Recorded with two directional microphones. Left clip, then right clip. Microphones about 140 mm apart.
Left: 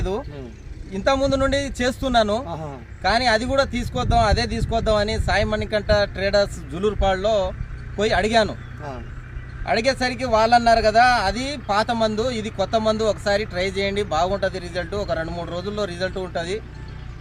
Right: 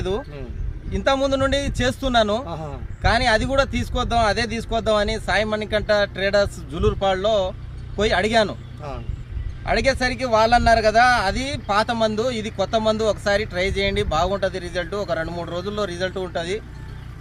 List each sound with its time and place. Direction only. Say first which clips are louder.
0.9 s a man's voice: even; 10° left (ahead or behind)
2.5 s a man's voice: even; 15° right (ahead or behind)
3.0 s a man's voice: even; 10° left (ahead or behind)
9.6 s a man's voice: right 1 dB; 10° left (ahead or behind)